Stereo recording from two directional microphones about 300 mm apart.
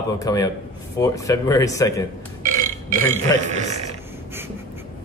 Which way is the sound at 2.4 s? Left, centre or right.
Right.